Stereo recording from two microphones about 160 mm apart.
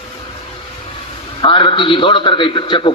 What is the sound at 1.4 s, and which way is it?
A man's voice, 30° left (ahead or behind).